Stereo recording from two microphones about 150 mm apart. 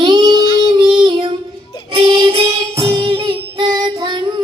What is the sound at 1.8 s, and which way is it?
Music, 25° right (ahead or behind).